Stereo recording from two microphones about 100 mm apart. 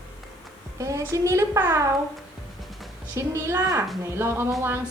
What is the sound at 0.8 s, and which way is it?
A woman's voice, 30° right (ahead or behind).